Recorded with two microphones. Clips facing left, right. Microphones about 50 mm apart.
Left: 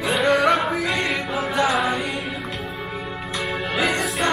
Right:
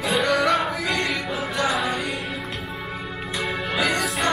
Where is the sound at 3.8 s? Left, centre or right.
Centre.